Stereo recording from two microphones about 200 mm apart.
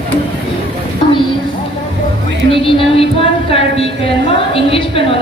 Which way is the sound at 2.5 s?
25° left (ahead or behind).